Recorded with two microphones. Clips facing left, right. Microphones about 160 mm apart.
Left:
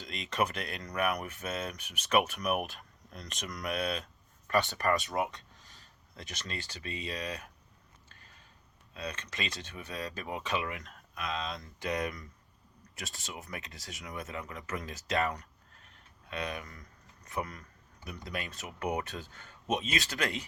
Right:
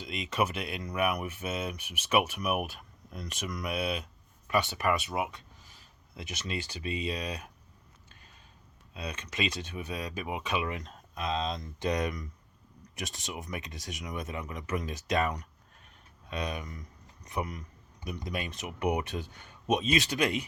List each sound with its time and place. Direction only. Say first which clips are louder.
0.4 s speech: right 2 dB; 5° right (ahead or behind)
8.9 s speech: right 1 dB; 15° right (ahead or behind)